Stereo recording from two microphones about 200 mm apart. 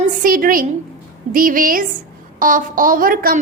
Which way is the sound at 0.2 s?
45° right (ahead or behind).